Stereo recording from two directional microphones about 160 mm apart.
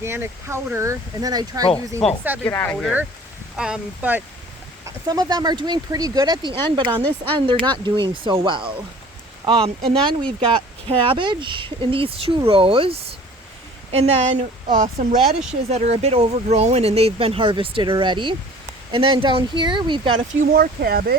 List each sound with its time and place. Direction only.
0.0 s speech: 15° right (ahead or behind)
2.0 s speech: centre (ahead or behind)
2.4 s speech: 15° left (ahead or behind)
3.6 s speech: 10° right (ahead or behind)
5.0 s speech: 25° right (ahead or behind); by 15.2 s 55° right (ahead or behind)
15.7 s speech: 40° right (ahead or behind)
20.1 s speech: 60° right (ahead or behind)